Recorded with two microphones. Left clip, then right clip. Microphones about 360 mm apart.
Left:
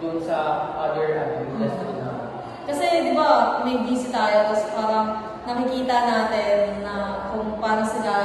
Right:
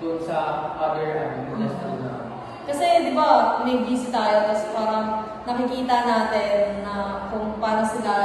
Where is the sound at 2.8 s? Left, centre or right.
Centre.